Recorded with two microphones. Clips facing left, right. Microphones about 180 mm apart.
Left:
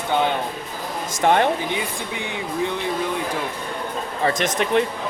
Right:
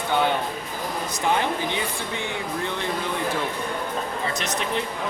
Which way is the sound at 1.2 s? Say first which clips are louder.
Left 6 dB; 70° left (ahead or behind).